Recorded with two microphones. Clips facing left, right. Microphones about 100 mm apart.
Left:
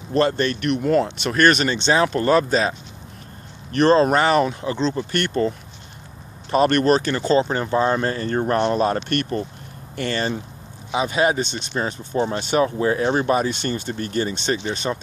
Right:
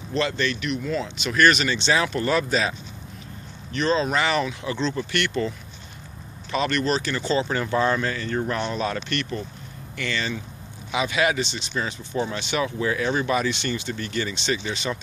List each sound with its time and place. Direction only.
0.1 s speech: 45° left (ahead or behind)
1.2 s speech: 45° left (ahead or behind)
3.7 s speech: 55° left (ahead or behind)
6.5 s speech: 50° left (ahead or behind)